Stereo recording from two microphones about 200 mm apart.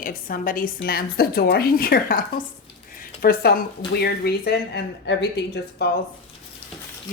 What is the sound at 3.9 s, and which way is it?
Speech, 50° left (ahead or behind).